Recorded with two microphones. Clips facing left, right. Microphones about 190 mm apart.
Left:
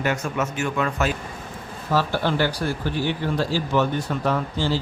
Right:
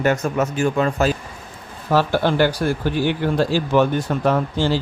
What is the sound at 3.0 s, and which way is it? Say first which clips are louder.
Speech: right 5 dB; 55° right (ahead or behind).